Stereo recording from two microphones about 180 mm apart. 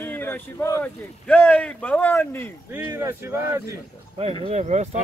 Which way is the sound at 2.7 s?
15° right (ahead or behind).